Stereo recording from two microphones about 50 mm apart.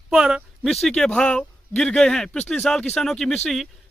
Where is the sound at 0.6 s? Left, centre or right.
Centre.